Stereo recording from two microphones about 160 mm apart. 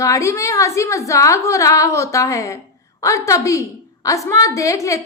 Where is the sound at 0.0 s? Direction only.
20° left (ahead or behind).